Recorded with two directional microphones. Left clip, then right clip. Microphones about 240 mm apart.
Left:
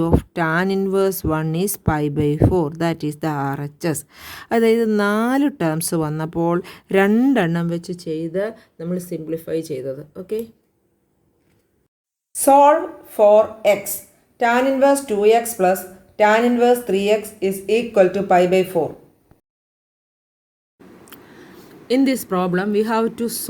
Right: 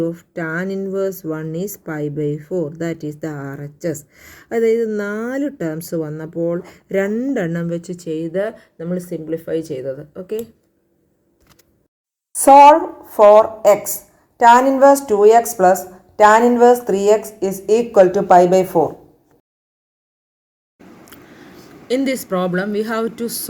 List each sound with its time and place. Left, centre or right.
0.0 s a woman's voice: left; by 10.3 s centre
13.1 s a woman's voice: centre
21.1 s speech: left